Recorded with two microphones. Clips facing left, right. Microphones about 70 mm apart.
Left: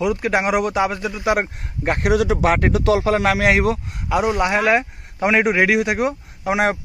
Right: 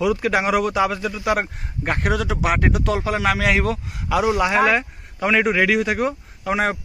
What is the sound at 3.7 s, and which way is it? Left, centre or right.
Speech, centre.